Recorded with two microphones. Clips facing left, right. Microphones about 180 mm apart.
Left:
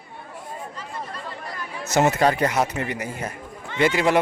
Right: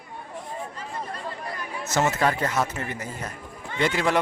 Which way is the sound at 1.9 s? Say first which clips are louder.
Left 4 dB; 15° left (ahead or behind).